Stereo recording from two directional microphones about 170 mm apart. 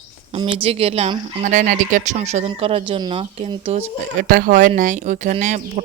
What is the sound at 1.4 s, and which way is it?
Speech, 50° right (ahead or behind).